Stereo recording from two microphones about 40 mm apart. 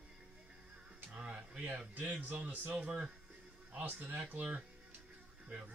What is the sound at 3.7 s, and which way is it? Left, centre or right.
Speech, right.